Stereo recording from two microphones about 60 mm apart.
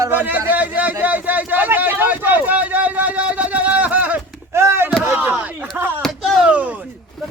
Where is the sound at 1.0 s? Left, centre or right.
Right.